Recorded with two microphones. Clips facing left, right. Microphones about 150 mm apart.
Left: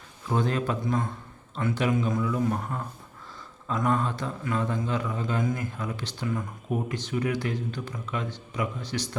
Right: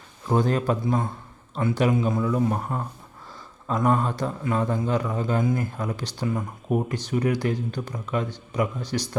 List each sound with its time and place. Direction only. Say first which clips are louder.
0.3 s a man's voice: right 4 dB; 40° right (ahead or behind)